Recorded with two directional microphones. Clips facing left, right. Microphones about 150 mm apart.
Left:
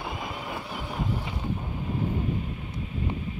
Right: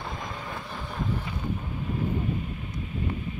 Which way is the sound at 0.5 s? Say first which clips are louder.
Left 2 dB; 15° left (ahead or behind).